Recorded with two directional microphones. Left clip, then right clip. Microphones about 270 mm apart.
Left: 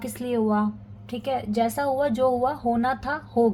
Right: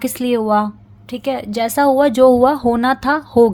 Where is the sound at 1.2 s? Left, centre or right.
Right.